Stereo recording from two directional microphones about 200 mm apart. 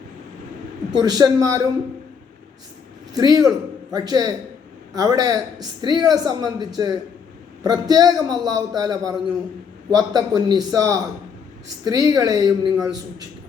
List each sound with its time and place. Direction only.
0.9 s speech: 20° right (ahead or behind)
3.2 s speech: 20° right (ahead or behind)